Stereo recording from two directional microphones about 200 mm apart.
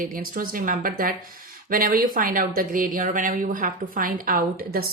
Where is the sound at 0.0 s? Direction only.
45° right (ahead or behind).